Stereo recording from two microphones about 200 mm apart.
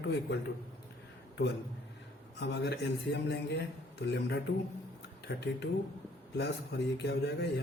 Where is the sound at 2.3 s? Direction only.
60° left (ahead or behind).